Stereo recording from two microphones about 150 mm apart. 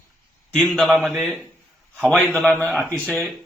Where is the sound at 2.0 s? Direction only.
10° left (ahead or behind).